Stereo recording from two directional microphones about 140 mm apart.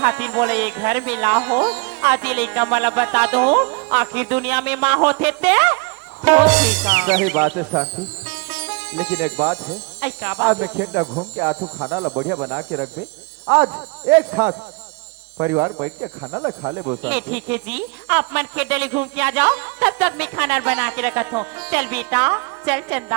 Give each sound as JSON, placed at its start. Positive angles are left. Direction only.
{"t": 0.0, "sound": "speech", "side_deg": -15}
{"t": 11.0, "sound": "speech", "side_deg": -35}
{"t": 14.4, "sound": "speech", "side_deg": -10}
{"t": 17.0, "sound": "speech", "side_deg": -10}